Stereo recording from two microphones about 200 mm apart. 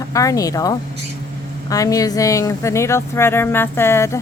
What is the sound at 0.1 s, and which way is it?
Speech, 15° left (ahead or behind).